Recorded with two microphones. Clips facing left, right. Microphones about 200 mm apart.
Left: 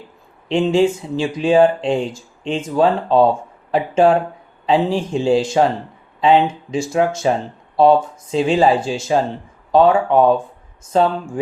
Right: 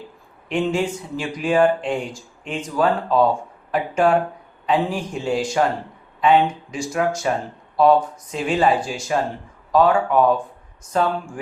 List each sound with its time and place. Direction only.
0.4 s speech: 25° left (ahead or behind)